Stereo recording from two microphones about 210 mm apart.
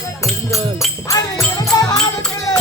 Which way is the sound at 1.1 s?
15° left (ahead or behind).